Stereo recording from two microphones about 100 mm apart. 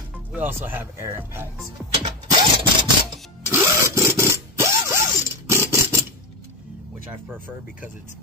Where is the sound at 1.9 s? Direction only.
70° right (ahead or behind).